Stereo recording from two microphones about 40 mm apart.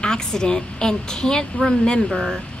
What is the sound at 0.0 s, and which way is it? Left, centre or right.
A woman's voice, centre.